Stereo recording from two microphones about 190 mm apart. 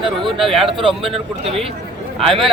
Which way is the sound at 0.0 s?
25° right (ahead or behind).